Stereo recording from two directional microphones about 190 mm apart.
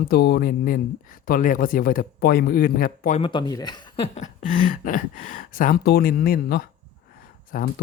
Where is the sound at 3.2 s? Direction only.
25° left (ahead or behind).